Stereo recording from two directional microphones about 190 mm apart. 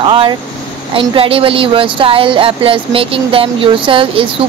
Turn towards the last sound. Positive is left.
turn(degrees=-25)  # may be behind; listen again after turning